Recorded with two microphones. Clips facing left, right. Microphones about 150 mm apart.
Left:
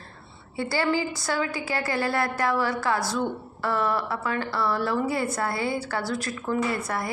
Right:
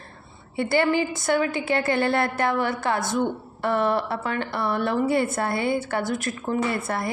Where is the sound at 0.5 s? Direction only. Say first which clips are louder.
Right 4 dB; 20° right (ahead or behind).